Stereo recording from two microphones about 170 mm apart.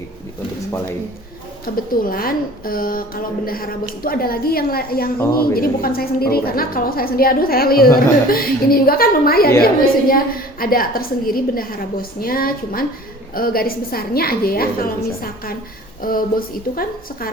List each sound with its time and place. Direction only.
1.6 s a woman's voice: 55° left (ahead or behind)